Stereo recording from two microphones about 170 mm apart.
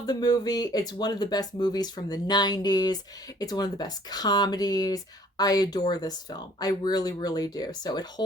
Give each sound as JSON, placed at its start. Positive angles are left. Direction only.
{"t": 0.0, "sound": "speech", "side_deg": 25}